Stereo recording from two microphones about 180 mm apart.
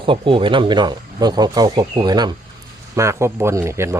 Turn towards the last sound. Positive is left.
turn(degrees=-15)  # may be behind; listen again after turning